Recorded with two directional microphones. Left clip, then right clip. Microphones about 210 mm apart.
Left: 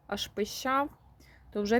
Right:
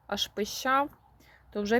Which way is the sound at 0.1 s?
Centre (ahead or behind).